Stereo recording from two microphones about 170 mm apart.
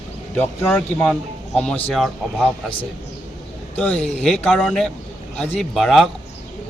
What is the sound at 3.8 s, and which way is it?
Speech, 5° left (ahead or behind).